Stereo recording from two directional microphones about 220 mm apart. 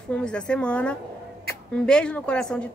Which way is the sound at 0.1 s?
5° left (ahead or behind).